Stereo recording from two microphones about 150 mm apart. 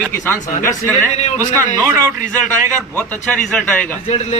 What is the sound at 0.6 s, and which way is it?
Speech, 15° left (ahead or behind).